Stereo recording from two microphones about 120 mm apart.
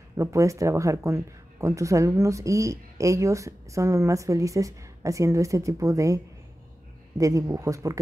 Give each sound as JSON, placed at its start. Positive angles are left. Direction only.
{"t": 0.2, "sound": "speech", "side_deg": -25}